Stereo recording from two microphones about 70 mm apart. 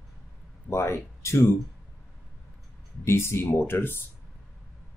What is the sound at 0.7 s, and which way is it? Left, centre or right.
Speech, left.